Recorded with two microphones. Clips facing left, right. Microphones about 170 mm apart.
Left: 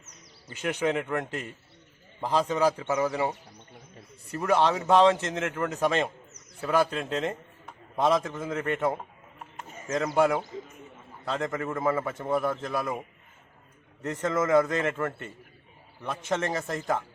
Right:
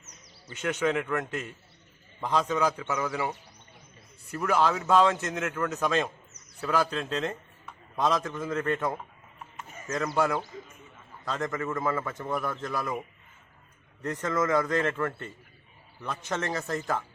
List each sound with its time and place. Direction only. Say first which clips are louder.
0.6 s a man's voice: even; 20° left (ahead or behind)
10.5 s a sound: left 4 dB; 25° left (ahead or behind)
11.3 s a man's voice: left 1 dB; 25° left (ahead or behind)
14.0 s a man's voice: left 1 dB; 25° left (ahead or behind)